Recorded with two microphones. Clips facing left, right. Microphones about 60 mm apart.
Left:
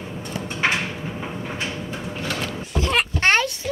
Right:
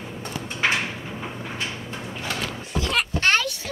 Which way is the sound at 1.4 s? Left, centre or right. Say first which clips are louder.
Left 3 dB; left.